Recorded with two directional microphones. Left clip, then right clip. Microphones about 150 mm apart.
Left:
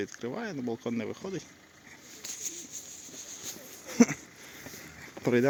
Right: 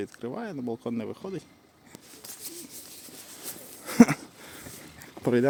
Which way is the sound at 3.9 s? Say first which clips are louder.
Right 5 dB; 90° right.